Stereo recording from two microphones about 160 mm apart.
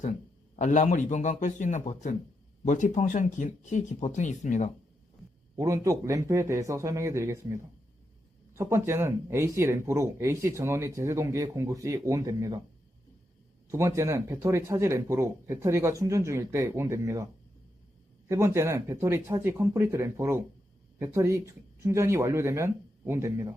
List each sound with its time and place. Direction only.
0.5 s speech: 50° left (ahead or behind)
5.5 s speech: 20° right (ahead or behind)
13.7 s speech: 15° right (ahead or behind)
18.3 s speech: 15° right (ahead or behind)